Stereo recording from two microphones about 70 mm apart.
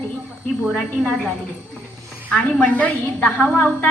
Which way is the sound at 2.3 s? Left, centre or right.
Centre.